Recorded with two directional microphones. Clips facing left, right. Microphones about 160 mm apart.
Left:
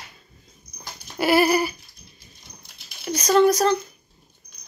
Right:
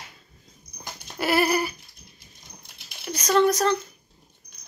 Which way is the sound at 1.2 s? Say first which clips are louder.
Left 4 dB; 5° left (ahead or behind).